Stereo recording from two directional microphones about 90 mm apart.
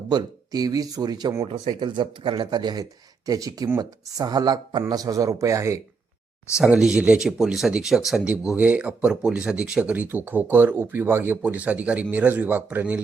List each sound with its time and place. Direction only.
0.1 s speech: 50° right (ahead or behind)
1.5 s speech: 75° right (ahead or behind); by 5.8 s 35° right (ahead or behind)
6.6 s speech: 10° right (ahead or behind)
8.3 s speech: 15° right (ahead or behind)